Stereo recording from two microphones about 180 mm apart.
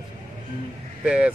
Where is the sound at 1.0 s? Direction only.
5° right (ahead or behind).